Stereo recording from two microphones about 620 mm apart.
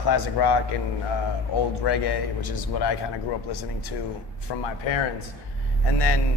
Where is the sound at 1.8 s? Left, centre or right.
Left.